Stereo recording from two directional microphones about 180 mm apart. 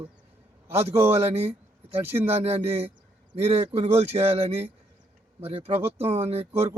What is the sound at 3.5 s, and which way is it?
Speech, 30° right (ahead or behind).